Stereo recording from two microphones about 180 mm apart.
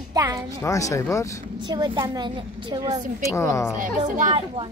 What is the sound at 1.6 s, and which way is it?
A woman's voice, 25° right (ahead or behind).